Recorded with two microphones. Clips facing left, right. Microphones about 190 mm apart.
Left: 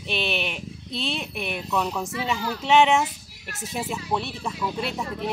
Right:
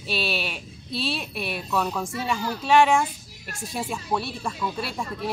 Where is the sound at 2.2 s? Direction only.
20° left (ahead or behind).